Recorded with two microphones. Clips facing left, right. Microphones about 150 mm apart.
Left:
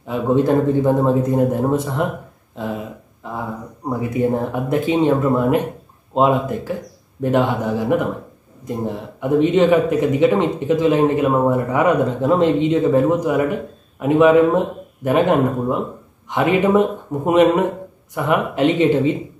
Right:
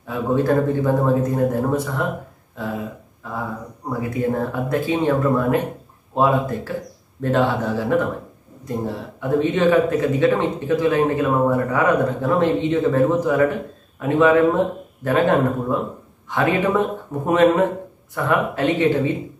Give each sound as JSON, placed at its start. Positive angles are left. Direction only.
{"t": 0.0, "sound": "speech", "side_deg": 20}
{"t": 3.2, "sound": "speech", "side_deg": 20}